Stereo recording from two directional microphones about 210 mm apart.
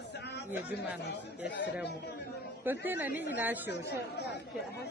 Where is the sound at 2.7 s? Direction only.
10° right (ahead or behind).